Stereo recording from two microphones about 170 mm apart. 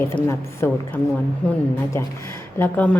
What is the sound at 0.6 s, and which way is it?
Speech, 10° left (ahead or behind).